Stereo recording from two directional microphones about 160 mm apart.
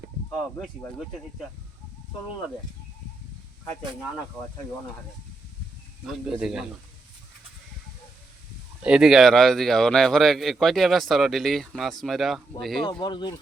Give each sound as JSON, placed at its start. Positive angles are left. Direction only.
{"t": 6.4, "sound": "speech", "side_deg": -5}
{"t": 8.8, "sound": "speech", "side_deg": -5}
{"t": 12.9, "sound": "speech", "side_deg": 30}